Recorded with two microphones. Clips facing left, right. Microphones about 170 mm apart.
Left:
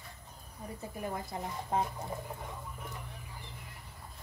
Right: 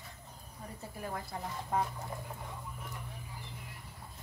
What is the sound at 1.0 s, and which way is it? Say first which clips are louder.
Speech: left 2 dB; 20° left (ahead or behind).